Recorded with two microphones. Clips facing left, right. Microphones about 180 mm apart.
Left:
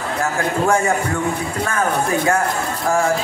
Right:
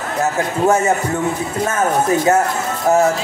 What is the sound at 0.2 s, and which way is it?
Speech, 20° right (ahead or behind).